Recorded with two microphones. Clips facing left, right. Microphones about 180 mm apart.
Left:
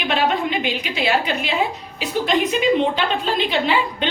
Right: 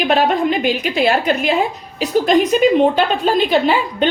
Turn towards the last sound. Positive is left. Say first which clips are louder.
# right 5 dB
turn(degrees=-45)  # may be behind; listen again after turning